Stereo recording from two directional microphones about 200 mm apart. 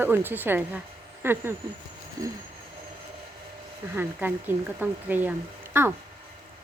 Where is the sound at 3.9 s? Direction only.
10° right (ahead or behind).